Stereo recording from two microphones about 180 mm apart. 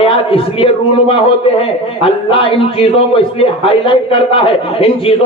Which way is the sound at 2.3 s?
30° left (ahead or behind).